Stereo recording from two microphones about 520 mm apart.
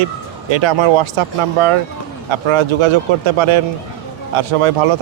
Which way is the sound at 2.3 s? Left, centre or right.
Right.